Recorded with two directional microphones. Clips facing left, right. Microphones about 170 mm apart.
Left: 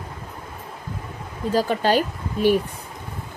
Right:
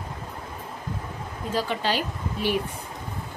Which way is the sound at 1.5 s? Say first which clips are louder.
Left 7 dB; 45° left (ahead or behind).